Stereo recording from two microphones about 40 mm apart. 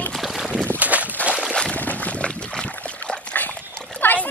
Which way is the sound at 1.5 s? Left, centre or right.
Left.